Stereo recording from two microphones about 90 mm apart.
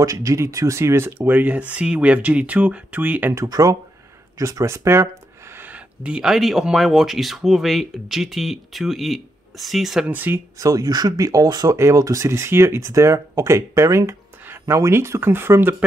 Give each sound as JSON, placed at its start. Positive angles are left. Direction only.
{"t": 0.0, "sound": "speech", "side_deg": -40}
{"t": 3.3, "sound": "speech", "side_deg": -45}
{"t": 6.0, "sound": "speech", "side_deg": -10}
{"t": 10.0, "sound": "speech", "side_deg": -20}
{"t": 10.6, "sound": "speech", "side_deg": -45}
{"t": 11.7, "sound": "speech", "side_deg": -35}